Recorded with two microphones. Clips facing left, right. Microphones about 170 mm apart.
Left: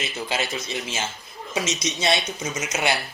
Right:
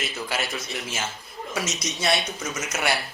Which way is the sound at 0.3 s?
25° left (ahead or behind).